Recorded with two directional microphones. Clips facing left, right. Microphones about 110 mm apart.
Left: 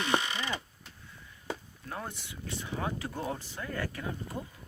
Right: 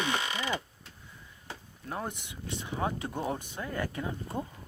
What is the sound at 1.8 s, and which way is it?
Speech, 20° right (ahead or behind).